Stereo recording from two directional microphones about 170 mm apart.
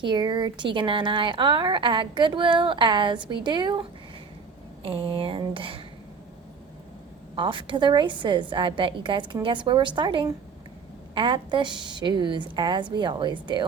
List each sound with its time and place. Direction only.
0.0 s a woman's voice: 25° right (ahead or behind)
5.0 s speech: 30° right (ahead or behind)
7.3 s a woman's voice: 30° right (ahead or behind)